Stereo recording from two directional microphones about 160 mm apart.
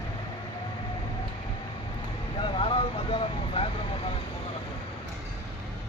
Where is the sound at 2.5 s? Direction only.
35° left (ahead or behind).